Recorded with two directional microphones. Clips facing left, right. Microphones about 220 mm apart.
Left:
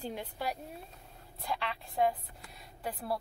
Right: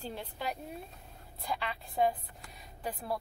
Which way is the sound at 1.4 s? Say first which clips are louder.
Even; centre (ahead or behind).